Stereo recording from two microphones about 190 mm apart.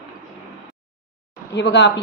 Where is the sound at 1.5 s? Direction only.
65° left (ahead or behind).